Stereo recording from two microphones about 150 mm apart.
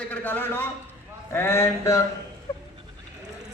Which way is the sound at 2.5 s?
25° left (ahead or behind).